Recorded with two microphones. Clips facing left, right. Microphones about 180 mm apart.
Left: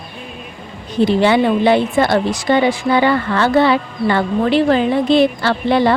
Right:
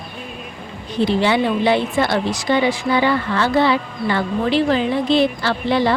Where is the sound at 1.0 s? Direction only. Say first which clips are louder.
Left 4 dB; 50° left (ahead or behind).